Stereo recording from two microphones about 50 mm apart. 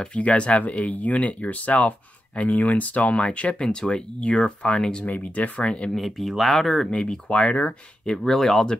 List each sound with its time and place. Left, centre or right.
0.1 s speech: left
3.6 s speech: centre
4.2 s speech: left
5.6 s speech: centre
5.9 s speech: centre
6.9 s speech: left
8.0 s speech: centre